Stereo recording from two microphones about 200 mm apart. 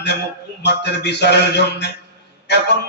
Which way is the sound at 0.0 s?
55° left (ahead or behind).